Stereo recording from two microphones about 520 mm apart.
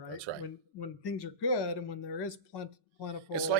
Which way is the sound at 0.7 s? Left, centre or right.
Left.